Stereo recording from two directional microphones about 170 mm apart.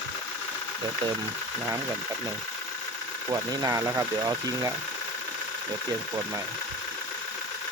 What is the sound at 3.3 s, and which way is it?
Speech, 20° right (ahead or behind).